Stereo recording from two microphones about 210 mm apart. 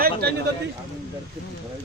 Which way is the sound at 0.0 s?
50° right (ahead or behind).